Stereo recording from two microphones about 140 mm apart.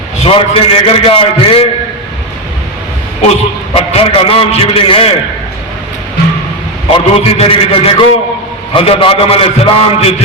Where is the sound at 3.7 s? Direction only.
45° left (ahead or behind).